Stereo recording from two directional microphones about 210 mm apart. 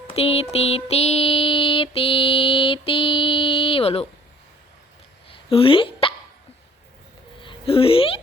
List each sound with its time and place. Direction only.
0.1 s music: 25° left (ahead or behind)
5.3 s dog: 25° left (ahead or behind)
7.4 s speech: 25° left (ahead or behind)